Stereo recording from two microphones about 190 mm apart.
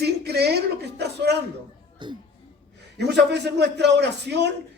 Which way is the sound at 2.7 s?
60° right (ahead or behind).